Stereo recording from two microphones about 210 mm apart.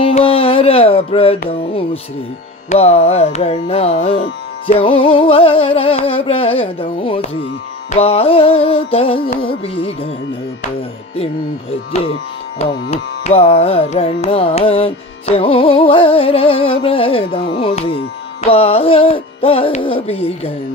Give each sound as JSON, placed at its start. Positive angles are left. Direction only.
{"t": 0.0, "sound": "music", "side_deg": 25}
{"t": 12.9, "sound": "music", "side_deg": 30}